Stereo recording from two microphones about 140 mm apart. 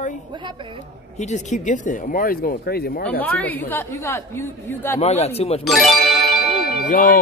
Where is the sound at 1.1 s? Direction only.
55° left (ahead or behind); by 3.2 s 90° left.